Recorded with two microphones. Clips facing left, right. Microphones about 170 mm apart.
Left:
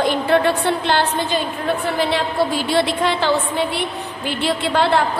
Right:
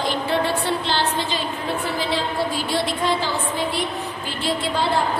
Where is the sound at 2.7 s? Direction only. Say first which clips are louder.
Left 3 dB; 70° left (ahead or behind).